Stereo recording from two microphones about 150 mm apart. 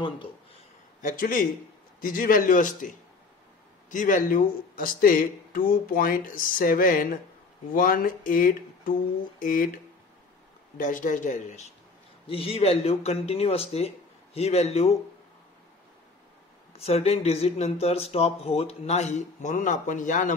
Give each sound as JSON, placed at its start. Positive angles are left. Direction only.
{"t": 1.0, "sound": "speech", "side_deg": 65}
{"t": 3.9, "sound": "speech", "side_deg": 60}
{"t": 10.8, "sound": "speech", "side_deg": 60}
{"t": 12.3, "sound": "speech", "side_deg": 40}
{"t": 16.7, "sound": "speech", "side_deg": 45}